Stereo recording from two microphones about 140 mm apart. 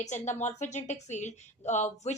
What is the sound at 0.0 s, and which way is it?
Speech, 55° left (ahead or behind).